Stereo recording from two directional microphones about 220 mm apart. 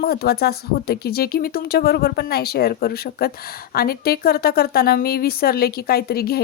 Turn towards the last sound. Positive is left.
turn(degrees=45)  # may be behind; listen again after turning